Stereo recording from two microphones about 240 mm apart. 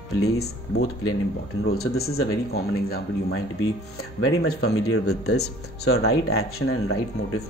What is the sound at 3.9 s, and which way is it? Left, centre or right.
Speech, left.